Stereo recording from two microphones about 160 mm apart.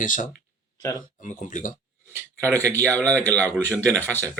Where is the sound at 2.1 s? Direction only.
20° right (ahead or behind).